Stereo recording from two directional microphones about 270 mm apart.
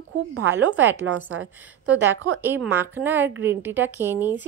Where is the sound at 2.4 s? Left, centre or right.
Centre.